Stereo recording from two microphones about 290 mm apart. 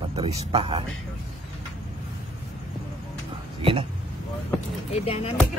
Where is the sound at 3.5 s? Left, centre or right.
Centre.